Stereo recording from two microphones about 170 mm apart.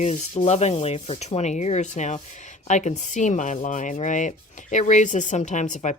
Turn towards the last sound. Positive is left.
turn(degrees=45)  # may be behind; listen again after turning